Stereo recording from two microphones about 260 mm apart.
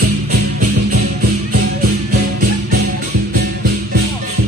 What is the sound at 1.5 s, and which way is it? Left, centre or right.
Music, right.